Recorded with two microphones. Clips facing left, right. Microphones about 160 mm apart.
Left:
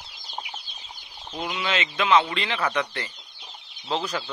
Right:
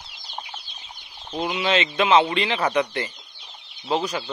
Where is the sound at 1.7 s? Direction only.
25° right (ahead or behind).